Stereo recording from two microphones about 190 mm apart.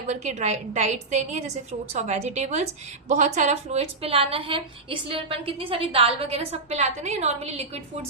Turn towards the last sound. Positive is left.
turn(degrees=-35)  # may be behind; listen again after turning